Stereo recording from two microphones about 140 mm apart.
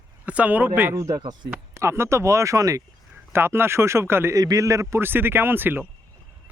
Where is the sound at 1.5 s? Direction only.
15° right (ahead or behind).